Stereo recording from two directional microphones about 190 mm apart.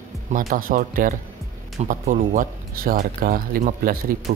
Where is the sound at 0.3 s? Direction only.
45° right (ahead or behind).